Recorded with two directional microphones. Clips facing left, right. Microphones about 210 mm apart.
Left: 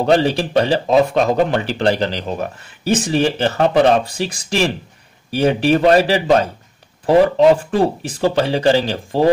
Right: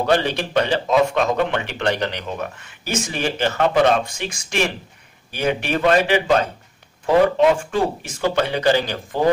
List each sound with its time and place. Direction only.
0.0 s speech: 30° left (ahead or behind)